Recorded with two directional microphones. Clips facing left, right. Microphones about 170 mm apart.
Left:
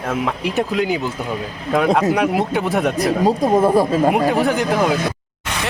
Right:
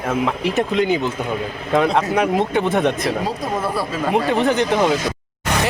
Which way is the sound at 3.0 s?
45° left (ahead or behind).